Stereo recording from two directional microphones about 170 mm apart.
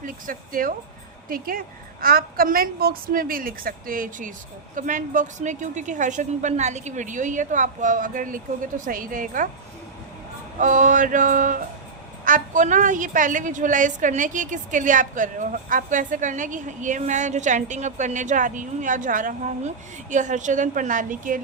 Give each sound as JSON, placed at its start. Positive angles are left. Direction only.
{"t": 0.0, "sound": "a woman's voice", "side_deg": -55}
{"t": 10.6, "sound": "a woman's voice", "side_deg": -50}